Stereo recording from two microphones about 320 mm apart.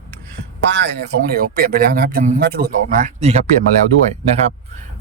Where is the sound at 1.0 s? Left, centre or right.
Right.